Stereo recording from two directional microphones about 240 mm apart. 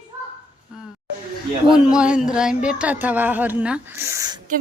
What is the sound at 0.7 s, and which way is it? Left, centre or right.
Speech, centre.